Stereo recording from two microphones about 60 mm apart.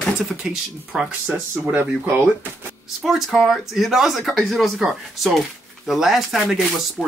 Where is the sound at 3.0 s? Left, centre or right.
Centre.